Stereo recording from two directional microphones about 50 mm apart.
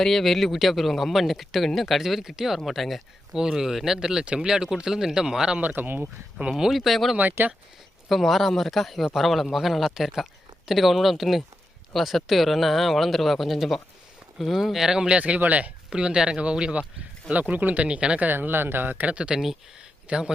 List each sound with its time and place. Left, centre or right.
0.0 s speech: centre
5.5 s speech: right
6.5 s speech: centre
7.2 s speech: right
8.1 s speech: centre
14.8 s speech: centre
15.9 s speech: centre; by 17.8 s right
17.8 s speech: centre
18.2 s speech: right
19.0 s a man's voice: right